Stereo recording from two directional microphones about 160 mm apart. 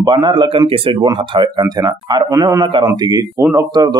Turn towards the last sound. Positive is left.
turn(degrees=-25)  # may be behind; listen again after turning